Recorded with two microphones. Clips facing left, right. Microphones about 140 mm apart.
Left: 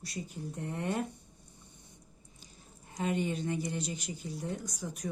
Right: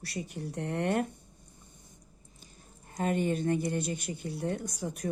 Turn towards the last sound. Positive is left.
turn(degrees=-60)  # may be behind; listen again after turning